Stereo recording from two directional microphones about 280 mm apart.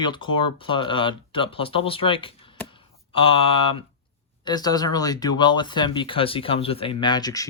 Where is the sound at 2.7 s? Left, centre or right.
Centre.